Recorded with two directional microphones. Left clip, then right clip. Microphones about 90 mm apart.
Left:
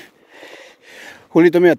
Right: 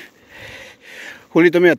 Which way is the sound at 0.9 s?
50° left (ahead or behind).